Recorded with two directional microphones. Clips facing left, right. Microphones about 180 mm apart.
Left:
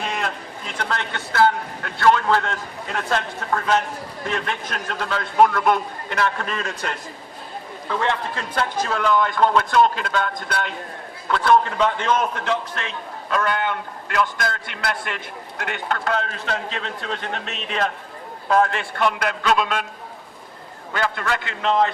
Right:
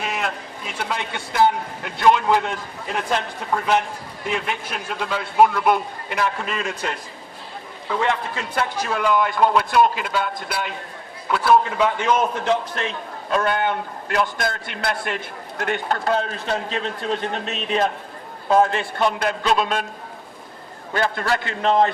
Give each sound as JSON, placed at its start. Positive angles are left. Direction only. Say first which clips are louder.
{"t": 0.0, "sound": "a sound", "louder": "even", "side_deg": -5}
{"t": 0.7, "sound": "a man's voice", "louder": "even", "side_deg": -10}
{"t": 13.3, "sound": "a man's voice", "louder": "right 2 dB", "side_deg": -30}
{"t": 18.4, "sound": "a man's voice", "louder": "right 2 dB", "side_deg": -25}
{"t": 20.9, "sound": "a man's voice", "louder": "right 2 dB", "side_deg": -35}